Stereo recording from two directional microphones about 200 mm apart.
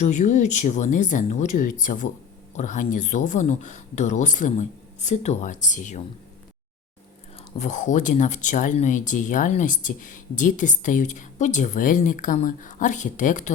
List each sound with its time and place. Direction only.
0.0 s speech: 35° left (ahead or behind)
7.5 s speech: 35° left (ahead or behind)